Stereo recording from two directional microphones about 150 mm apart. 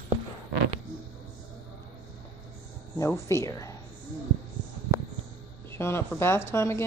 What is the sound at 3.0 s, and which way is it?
Speech, 20° left (ahead or behind).